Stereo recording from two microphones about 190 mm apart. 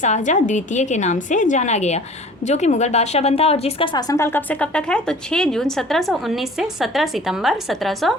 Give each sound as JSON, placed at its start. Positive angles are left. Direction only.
{"t": 0.0, "sound": "a woman's voice", "side_deg": 40}